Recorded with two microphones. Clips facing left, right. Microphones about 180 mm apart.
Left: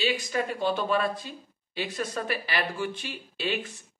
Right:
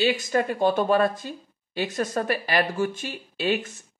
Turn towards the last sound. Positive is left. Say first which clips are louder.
# right 5 dB
turn(degrees=-45)  # may be behind; listen again after turning